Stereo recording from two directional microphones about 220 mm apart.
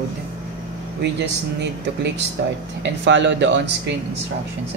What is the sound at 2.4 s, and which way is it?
Speech, 50° right (ahead or behind).